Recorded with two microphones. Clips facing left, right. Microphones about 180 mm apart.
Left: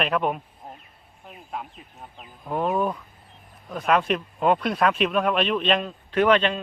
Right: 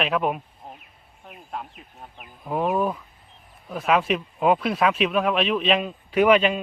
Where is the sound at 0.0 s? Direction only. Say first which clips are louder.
Even; centre (ahead or behind).